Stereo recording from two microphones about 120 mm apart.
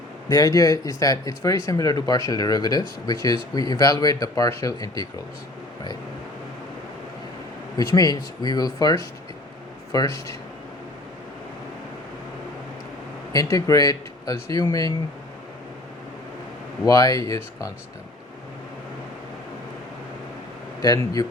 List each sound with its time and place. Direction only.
0.3 s speech: 30° left (ahead or behind)
7.9 s speech: 35° left (ahead or behind)
13.3 s speech: 30° left (ahead or behind)
16.8 s speech: 30° left (ahead or behind)
20.8 s speech: 30° left (ahead or behind)